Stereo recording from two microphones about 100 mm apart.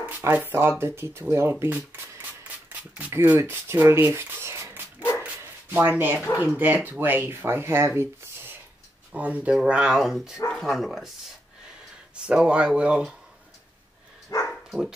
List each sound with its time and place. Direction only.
0.5 s speech: 25° right (ahead or behind)
1.3 s shuffling cards: 25° right (ahead or behind)
3.2 s speech: 20° right (ahead or behind)
5.2 s bow-wow: 20° right (ahead or behind)
6.3 s speech: 15° right (ahead or behind)
14.3 s dog: 35° left (ahead or behind)